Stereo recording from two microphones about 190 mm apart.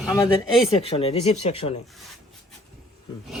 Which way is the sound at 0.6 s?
30° left (ahead or behind).